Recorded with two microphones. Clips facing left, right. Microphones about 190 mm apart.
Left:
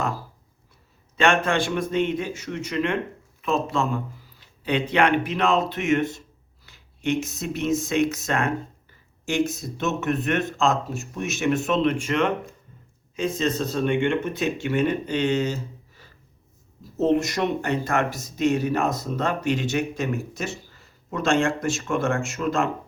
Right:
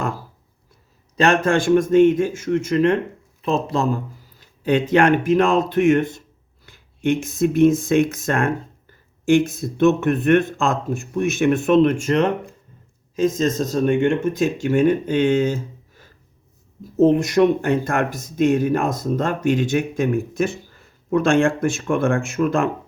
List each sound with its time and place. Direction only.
1.1 s speech: 40° right (ahead or behind); by 22.7 s 55° right (ahead or behind)